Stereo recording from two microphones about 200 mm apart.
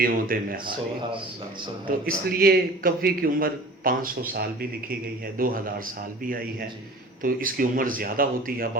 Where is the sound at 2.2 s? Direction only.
50° right (ahead or behind).